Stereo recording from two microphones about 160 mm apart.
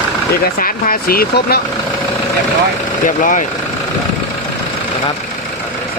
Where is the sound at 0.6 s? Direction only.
60° left (ahead or behind).